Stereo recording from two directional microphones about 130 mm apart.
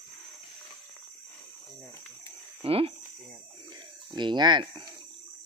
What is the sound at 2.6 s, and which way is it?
Speech, 45° right (ahead or behind).